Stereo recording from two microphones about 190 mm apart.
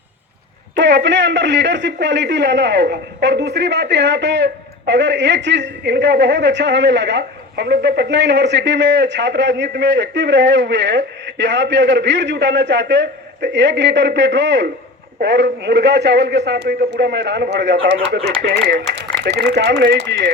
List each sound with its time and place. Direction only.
0.8 s a man's voice: 65° right (ahead or behind)